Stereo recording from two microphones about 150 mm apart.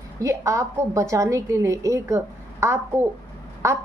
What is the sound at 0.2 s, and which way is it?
A woman's voice, 20° right (ahead or behind).